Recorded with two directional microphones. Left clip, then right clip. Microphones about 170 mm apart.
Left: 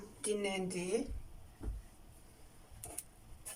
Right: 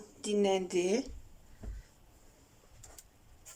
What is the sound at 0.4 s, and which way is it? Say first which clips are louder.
Speech: right 8 dB; 50° right (ahead or behind).